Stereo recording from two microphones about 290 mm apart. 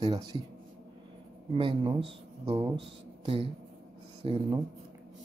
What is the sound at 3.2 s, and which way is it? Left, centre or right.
Speech, centre.